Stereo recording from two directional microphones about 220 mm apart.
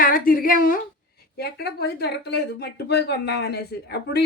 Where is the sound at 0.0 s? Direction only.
40° left (ahead or behind).